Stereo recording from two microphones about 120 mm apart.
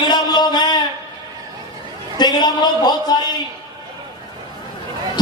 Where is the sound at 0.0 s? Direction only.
35° left (ahead or behind).